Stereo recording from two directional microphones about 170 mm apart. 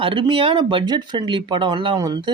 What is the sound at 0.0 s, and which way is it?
Speech, 30° right (ahead or behind).